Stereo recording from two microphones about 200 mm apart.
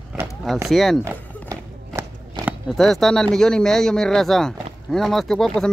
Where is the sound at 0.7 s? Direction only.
Centre (ahead or behind).